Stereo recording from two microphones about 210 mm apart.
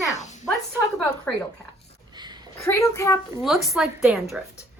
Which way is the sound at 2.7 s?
15° left (ahead or behind).